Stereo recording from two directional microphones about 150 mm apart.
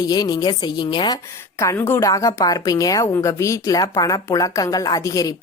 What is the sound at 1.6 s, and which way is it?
A woman's voice, 15° left (ahead or behind).